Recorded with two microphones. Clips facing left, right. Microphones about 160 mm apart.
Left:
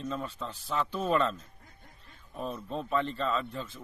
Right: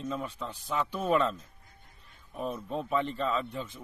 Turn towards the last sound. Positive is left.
turn(degrees=-15)  # may be behind; listen again after turning